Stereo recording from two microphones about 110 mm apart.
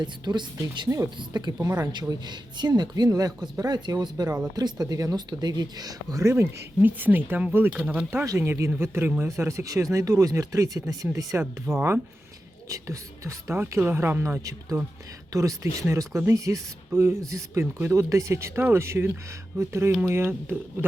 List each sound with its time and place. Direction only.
0.0 s speech: 45° right (ahead or behind)
1.6 s speech: 30° right (ahead or behind)
1.9 s speech: 40° right (ahead or behind); by 8.2 s 15° right (ahead or behind)
8.2 s speech: 25° right (ahead or behind)